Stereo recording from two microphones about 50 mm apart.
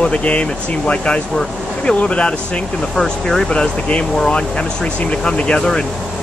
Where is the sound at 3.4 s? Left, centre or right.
Left.